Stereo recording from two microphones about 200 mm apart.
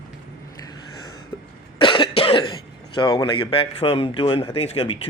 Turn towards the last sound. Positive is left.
turn(degrees=30)  # may be behind; listen again after turning